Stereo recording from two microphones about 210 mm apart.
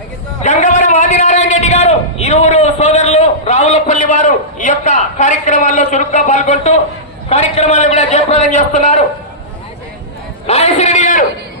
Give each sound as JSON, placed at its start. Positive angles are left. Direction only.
{"t": 0.4, "sound": "a sound", "side_deg": 35}
{"t": 7.3, "sound": "a man's voice", "side_deg": 30}
{"t": 10.4, "sound": "a man's voice", "side_deg": 30}